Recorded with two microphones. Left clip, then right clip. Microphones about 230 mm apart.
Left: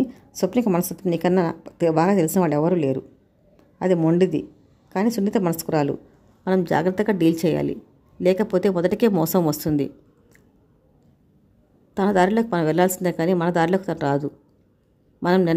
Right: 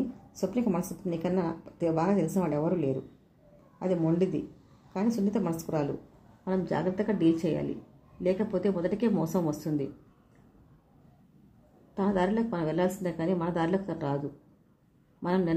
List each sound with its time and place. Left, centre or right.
0.3 s a woman's voice: left
11.9 s a woman's voice: left
15.2 s a woman's voice: left